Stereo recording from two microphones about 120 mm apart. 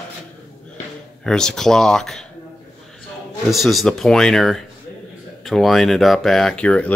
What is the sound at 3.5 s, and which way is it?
Speech, centre (ahead or behind).